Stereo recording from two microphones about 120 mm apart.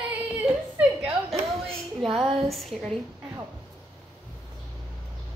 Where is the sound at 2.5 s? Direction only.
Centre (ahead or behind).